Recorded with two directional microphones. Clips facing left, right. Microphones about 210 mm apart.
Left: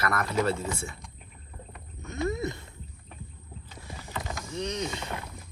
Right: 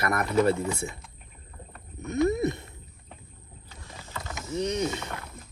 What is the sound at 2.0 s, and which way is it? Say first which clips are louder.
Wild animals: right 6 dB; 20° right (ahead or behind).